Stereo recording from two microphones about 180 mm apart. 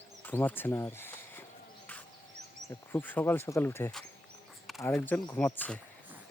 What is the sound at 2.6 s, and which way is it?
Speech, 10° left (ahead or behind).